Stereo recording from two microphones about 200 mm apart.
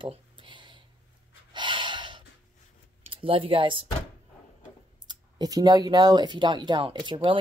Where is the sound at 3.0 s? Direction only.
25° right (ahead or behind).